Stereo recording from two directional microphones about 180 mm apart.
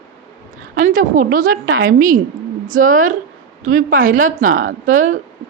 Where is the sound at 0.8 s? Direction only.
45° right (ahead or behind).